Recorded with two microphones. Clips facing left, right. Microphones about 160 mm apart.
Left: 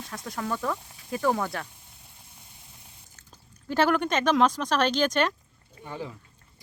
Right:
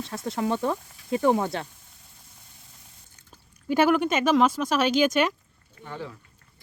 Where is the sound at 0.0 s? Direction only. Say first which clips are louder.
Right 6 dB; 25° right (ahead or behind).